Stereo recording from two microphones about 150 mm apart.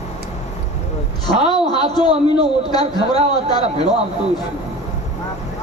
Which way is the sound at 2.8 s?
40° right (ahead or behind).